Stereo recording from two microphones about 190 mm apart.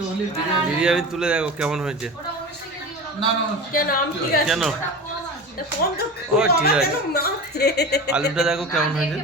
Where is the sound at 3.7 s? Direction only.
50° left (ahead or behind).